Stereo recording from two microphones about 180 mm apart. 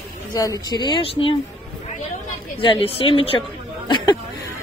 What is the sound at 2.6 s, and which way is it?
Speech, 30° left (ahead or behind).